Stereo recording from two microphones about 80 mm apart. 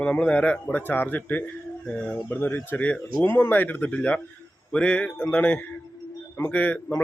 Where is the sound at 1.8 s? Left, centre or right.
Centre.